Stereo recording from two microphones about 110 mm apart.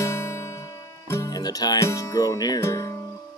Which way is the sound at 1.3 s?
35° left (ahead or behind).